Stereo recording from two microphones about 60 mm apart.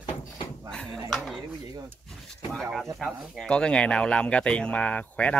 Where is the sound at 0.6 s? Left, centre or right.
Centre.